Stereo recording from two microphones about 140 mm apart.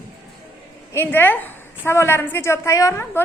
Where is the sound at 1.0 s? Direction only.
15° left (ahead or behind).